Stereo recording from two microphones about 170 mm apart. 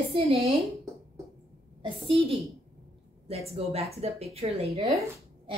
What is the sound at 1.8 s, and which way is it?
Speech, 30° right (ahead or behind).